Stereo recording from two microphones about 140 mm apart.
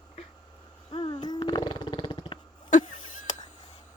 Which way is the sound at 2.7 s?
60° left (ahead or behind).